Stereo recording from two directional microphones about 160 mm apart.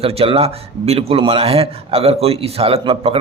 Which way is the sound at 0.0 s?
40° right (ahead or behind).